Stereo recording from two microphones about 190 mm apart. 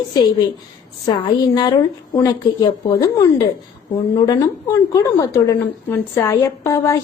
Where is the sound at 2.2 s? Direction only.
15° left (ahead or behind).